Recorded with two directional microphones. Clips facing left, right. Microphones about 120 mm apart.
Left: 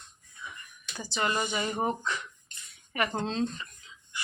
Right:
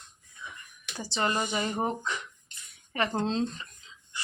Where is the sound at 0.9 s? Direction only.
30° right (ahead or behind).